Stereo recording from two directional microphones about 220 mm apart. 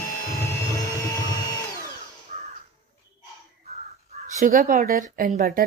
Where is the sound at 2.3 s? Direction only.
35° right (ahead or behind).